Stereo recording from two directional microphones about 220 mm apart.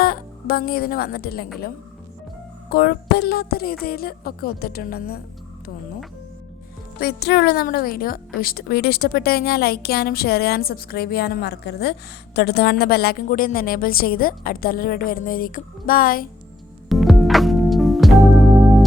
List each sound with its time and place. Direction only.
0.0 s speech: 45° left (ahead or behind)
2.6 s a woman's voice: 45° left (ahead or behind)
7.0 s a woman's voice: 50° left (ahead or behind)
16.9 s music: centre (ahead or behind)